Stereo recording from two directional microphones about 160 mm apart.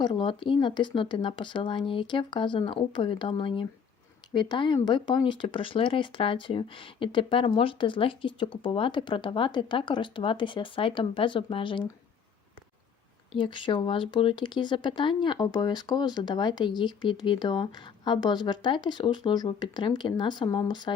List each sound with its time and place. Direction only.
0.0 s speech: 30° left (ahead or behind)
13.3 s speech: 30° left (ahead or behind)